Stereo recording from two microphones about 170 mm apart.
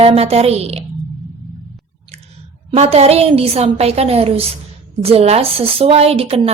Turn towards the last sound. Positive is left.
turn(degrees=-35)  # may be behind; listen again after turning